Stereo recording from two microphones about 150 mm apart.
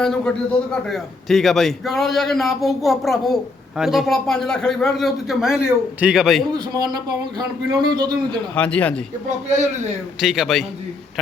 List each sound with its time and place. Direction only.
0.0 s a man's voice: 5° left (ahead or behind)
6.5 s speech: 25° right (ahead or behind)
8.5 s speech: 10° left (ahead or behind)
10.2 s a man's voice: centre (ahead or behind)